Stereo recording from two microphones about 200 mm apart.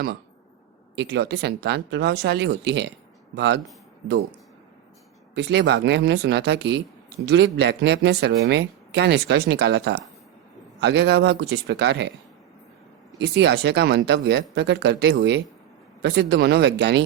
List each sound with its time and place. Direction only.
0.9 s speech: 55° right (ahead or behind)
5.3 s speech: 60° right (ahead or behind)
13.1 s speech: 60° right (ahead or behind)